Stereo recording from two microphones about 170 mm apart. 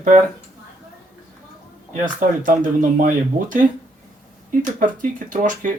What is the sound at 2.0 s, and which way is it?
Speech, 50° right (ahead or behind).